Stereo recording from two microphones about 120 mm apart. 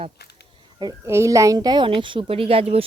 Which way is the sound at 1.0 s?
25° right (ahead or behind).